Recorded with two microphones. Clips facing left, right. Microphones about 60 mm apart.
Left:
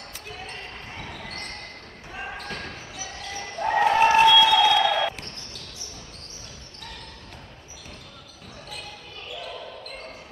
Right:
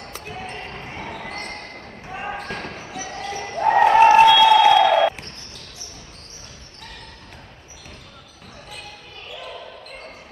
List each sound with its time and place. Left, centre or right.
0.2 s basketball bounce: right